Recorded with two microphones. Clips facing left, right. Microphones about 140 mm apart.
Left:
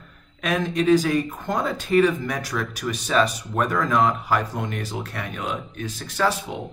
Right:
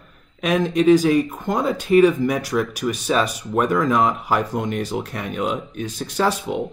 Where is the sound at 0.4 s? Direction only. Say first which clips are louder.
Right 4 dB; 15° right (ahead or behind).